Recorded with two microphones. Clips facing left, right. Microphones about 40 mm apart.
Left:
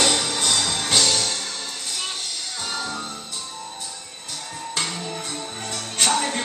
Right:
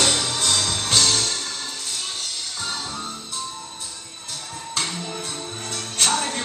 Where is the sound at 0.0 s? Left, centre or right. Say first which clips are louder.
Left 1 dB; centre.